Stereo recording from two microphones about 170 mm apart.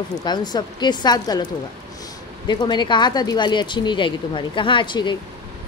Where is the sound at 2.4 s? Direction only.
25° left (ahead or behind).